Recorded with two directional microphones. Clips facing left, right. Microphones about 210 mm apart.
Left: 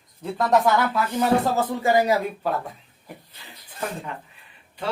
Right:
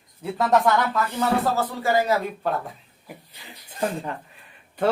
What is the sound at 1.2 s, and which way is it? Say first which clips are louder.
Speech: left 3 dB; 15° left (ahead or behind).